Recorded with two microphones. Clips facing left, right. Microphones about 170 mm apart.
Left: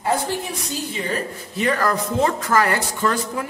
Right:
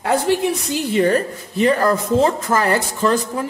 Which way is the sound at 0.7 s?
60° right (ahead or behind).